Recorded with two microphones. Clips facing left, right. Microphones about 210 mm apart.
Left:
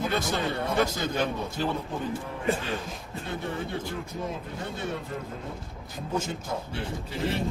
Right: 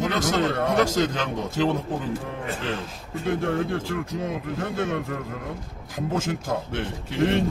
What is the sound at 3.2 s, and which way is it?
A man's voice, 90° right.